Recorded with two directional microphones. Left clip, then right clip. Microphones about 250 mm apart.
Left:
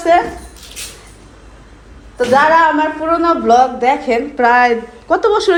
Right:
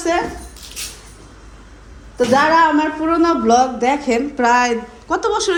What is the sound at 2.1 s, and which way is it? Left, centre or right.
A woman's voice, right.